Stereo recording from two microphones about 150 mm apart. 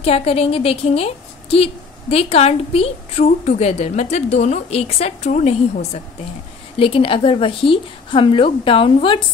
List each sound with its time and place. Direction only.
0.0 s a woman's voice: 40° left (ahead or behind)
6.8 s a woman's voice: 35° left (ahead or behind)